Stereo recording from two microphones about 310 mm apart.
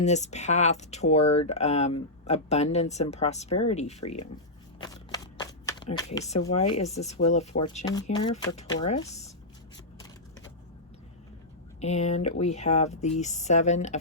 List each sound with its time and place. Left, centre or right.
0.0 s speech: left
4.8 s shuffling cards: centre
6.7 s speech: left
11.8 s speech: left